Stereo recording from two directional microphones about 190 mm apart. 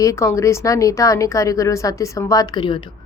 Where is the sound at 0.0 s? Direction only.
15° left (ahead or behind).